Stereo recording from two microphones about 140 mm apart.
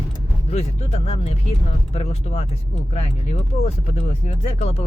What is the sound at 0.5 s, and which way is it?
Speech, 45° left (ahead or behind).